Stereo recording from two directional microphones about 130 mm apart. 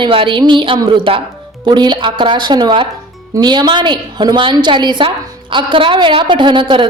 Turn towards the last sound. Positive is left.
turn(degrees=-40)  # may be behind; listen again after turning